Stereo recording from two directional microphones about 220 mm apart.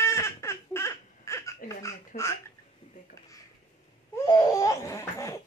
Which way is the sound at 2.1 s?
40° left (ahead or behind).